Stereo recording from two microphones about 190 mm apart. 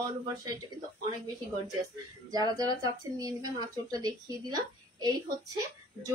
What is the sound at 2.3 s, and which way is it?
Speech, 20° right (ahead or behind).